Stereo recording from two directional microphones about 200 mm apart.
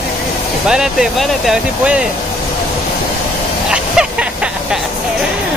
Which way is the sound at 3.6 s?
5° right (ahead or behind).